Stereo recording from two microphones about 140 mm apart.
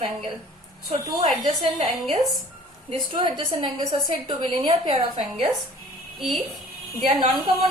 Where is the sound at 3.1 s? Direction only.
35° right (ahead or behind).